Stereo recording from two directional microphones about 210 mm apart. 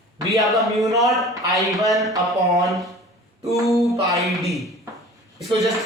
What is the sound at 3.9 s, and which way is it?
Speech, 15° right (ahead or behind).